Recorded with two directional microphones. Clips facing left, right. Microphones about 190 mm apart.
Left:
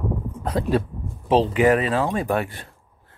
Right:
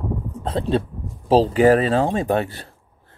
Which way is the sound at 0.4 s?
25° right (ahead or behind).